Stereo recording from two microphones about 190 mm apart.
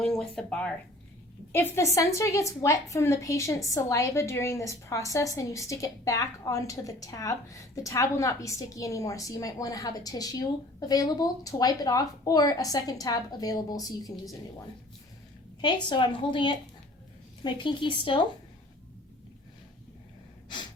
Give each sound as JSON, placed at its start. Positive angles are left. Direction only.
{"t": 0.0, "sound": "a woman's voice", "side_deg": 5}
{"t": 15.6, "sound": "a woman's voice", "side_deg": 25}